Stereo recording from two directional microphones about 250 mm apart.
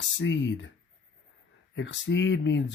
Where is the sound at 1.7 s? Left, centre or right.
Left.